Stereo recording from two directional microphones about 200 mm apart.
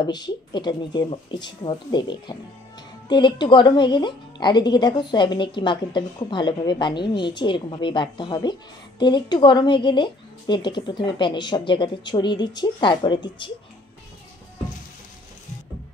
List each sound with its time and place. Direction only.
0.0 s speech: 20° left (ahead or behind)